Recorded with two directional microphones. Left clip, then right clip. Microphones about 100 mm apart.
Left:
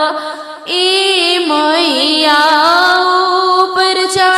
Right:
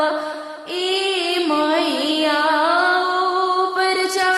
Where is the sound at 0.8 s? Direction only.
50° left (ahead or behind).